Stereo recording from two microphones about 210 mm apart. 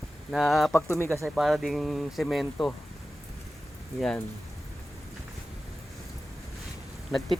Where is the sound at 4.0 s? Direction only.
Centre (ahead or behind).